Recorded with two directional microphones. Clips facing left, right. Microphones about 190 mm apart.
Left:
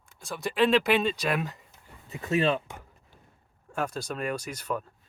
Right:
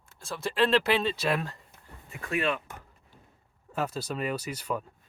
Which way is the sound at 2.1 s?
25° left (ahead or behind).